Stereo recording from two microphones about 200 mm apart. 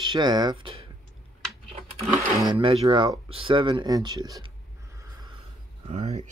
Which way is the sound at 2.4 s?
25° right (ahead or behind).